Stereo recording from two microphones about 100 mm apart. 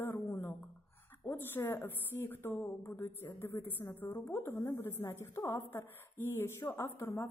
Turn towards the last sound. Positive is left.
turn(degrees=30)  # may be behind; listen again after turning